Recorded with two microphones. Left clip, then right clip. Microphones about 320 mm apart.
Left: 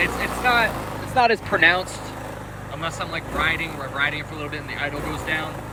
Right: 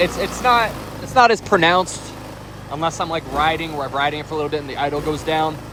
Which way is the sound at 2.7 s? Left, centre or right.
Centre.